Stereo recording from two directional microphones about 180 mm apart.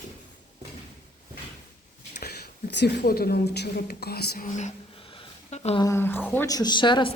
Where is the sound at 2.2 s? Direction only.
65° left (ahead or behind); by 5.8 s 35° left (ahead or behind).